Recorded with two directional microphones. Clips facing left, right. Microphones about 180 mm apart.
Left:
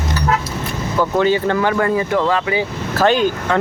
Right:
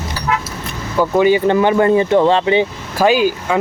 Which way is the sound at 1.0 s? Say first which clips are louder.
Right 3 dB; 15° right (ahead or behind).